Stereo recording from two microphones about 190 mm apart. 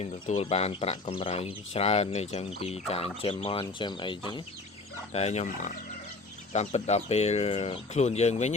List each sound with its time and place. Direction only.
0.0 s speech: 35° left (ahead or behind)
5.1 s speech: 35° left (ahead or behind)